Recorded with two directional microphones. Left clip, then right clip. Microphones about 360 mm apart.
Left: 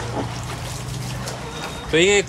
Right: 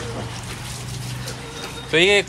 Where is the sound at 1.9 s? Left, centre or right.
Centre.